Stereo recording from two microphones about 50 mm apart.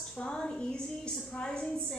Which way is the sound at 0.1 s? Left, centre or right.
Left.